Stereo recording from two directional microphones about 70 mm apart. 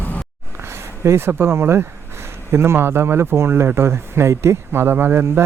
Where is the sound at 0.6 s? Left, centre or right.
Right.